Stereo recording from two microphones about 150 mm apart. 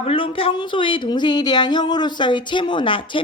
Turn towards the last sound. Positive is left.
turn(degrees=35)  # may be behind; listen again after turning